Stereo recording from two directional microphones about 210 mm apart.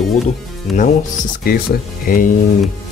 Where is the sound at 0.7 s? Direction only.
40° left (ahead or behind).